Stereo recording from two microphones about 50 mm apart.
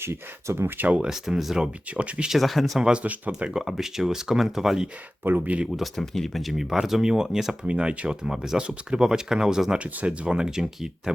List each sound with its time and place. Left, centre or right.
0.0 s speech: right
0.9 s speech: centre
1.2 s speech: centre
1.9 s speech: right
2.3 s speech: centre
2.8 s speech: right
3.6 s speech: centre
5.2 s speech: right
6.0 s speech: centre
7.7 s speech: right
9.7 s speech: right; by 11.1 s centre